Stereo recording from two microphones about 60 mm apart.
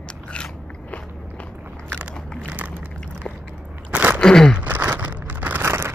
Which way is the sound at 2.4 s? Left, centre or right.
Right.